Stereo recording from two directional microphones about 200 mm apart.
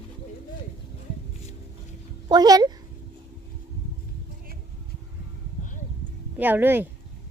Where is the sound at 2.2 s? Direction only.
20° right (ahead or behind).